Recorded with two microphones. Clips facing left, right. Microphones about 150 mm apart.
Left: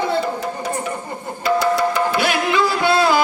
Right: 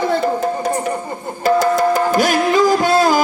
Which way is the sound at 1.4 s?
45° right (ahead or behind).